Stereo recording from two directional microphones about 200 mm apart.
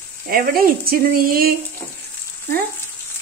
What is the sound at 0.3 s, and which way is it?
Speech, 45° right (ahead or behind).